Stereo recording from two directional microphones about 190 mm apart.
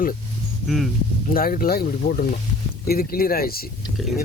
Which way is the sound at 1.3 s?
50° left (ahead or behind).